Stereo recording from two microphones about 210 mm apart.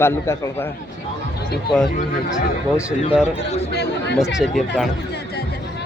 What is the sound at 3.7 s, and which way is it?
Speech, 50° left (ahead or behind).